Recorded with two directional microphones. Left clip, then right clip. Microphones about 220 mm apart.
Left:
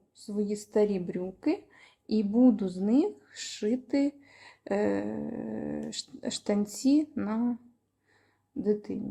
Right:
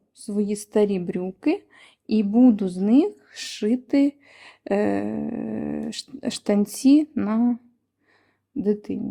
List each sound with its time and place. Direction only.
0.2 s a woman's voice: 45° right (ahead or behind)
8.6 s a woman's voice: 50° right (ahead or behind)